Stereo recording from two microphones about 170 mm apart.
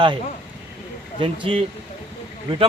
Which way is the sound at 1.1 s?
30° right (ahead or behind).